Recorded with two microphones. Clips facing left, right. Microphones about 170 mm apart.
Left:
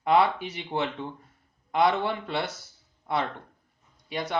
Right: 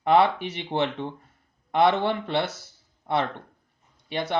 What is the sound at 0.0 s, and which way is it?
A man's voice, 30° right (ahead or behind).